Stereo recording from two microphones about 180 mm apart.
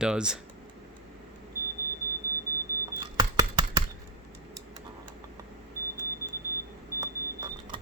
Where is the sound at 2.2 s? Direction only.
15° right (ahead or behind).